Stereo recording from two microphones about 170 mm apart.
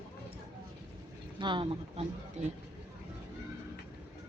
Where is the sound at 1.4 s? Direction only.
30° right (ahead or behind).